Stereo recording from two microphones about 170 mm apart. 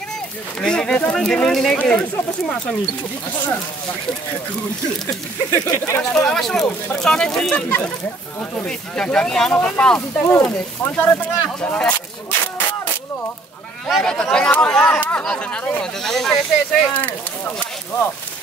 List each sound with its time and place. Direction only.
0.6 s speech: 5° left (ahead or behind)
5.0 s speech: 15° left (ahead or behind)
6.1 s speech: 5° left (ahead or behind)
11.6 s a sound: 10° left (ahead or behind)
13.8 s speech: centre (ahead or behind)